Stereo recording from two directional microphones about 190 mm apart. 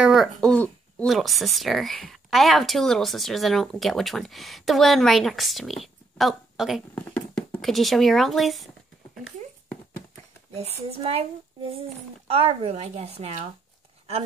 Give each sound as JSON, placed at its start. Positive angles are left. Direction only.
{"t": 0.0, "sound": "speech", "side_deg": 0}
{"t": 7.0, "sound": "speech", "side_deg": 10}
{"t": 10.5, "sound": "speech", "side_deg": -35}
{"t": 12.3, "sound": "speech", "side_deg": -30}